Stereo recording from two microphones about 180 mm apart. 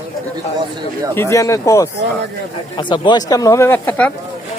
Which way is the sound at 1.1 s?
15° left (ahead or behind).